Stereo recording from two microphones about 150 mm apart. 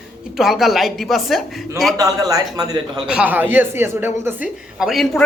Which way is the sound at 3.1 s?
10° right (ahead or behind).